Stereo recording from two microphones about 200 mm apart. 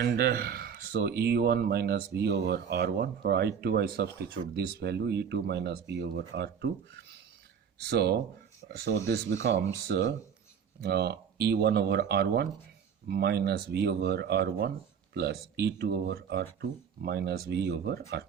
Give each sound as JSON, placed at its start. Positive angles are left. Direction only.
{"t": 0.0, "sound": "speech", "side_deg": -55}